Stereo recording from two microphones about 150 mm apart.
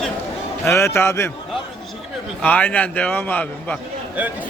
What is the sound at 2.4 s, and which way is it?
A man's voice, 10° left (ahead or behind).